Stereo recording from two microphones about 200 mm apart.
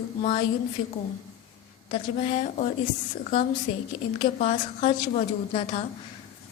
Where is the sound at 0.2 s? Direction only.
35° left (ahead or behind).